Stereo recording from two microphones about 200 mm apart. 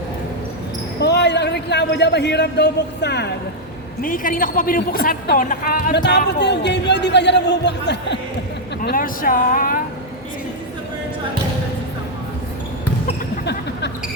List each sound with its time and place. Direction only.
1.0 s a man's voice: 60° left (ahead or behind)
4.0 s speech: 45° left (ahead or behind)
6.0 s speech: 55° left (ahead or behind)
8.8 s speech: 45° left (ahead or behind)
13.4 s a sound: 55° left (ahead or behind)